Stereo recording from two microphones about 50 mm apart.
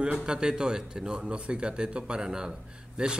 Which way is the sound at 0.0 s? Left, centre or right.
Centre.